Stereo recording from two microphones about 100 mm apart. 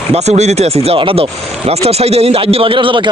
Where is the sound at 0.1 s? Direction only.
90° right.